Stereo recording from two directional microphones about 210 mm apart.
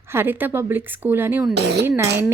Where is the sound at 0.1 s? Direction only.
10° right (ahead or behind).